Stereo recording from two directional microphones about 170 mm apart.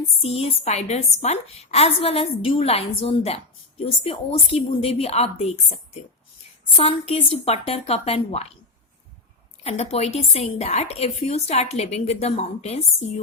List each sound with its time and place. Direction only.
0.2 s a woman's voice: 35° left (ahead or behind)
9.6 s a woman's voice: 40° left (ahead or behind)